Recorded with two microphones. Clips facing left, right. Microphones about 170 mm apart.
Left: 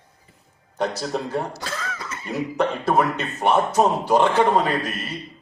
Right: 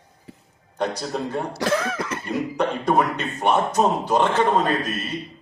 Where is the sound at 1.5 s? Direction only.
70° right (ahead or behind).